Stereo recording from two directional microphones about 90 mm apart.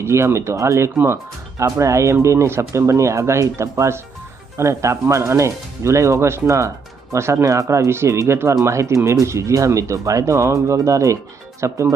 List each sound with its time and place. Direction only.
0.0 s speech: 30° right (ahead or behind)